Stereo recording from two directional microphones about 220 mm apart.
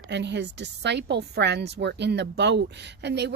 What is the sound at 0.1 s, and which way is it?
A woman's voice, 50° right (ahead or behind).